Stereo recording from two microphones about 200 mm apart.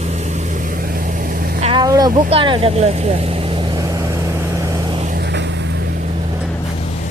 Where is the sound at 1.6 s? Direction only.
20° right (ahead or behind).